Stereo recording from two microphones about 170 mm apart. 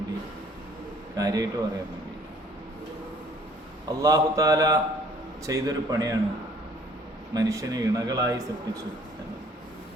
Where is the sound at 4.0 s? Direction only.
20° right (ahead or behind).